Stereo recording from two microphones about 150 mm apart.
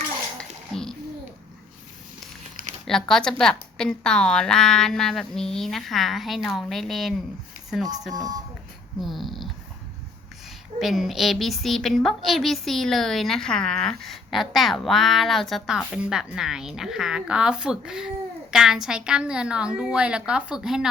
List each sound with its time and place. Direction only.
0.3 s dishes: 5° left (ahead or behind)
2.8 s a woman's voice: 5° left (ahead or behind)
8.1 s speech: 25° right (ahead or behind)
9.0 s a woman's voice: centre (ahead or behind)
10.8 s a woman's voice: centre (ahead or behind)